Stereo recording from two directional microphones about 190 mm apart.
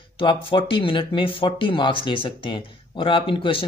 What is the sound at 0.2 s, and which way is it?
Speech, 25° left (ahead or behind).